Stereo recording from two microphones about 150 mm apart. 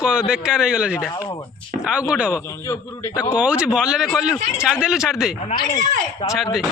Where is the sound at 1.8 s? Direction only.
5° right (ahead or behind).